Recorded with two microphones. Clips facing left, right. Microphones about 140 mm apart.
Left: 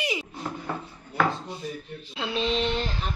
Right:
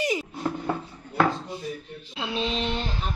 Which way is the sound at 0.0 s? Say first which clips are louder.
Right 4 dB; 45° right (ahead or behind).